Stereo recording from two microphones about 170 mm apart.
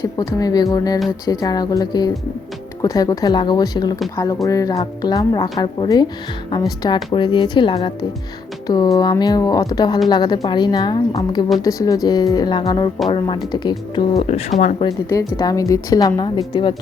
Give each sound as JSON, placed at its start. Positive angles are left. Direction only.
{"t": 0.0, "sound": "a woman's voice", "side_deg": 20}
{"t": 14.2, "sound": "speech", "side_deg": 35}
{"t": 15.4, "sound": "a woman's voice", "side_deg": 20}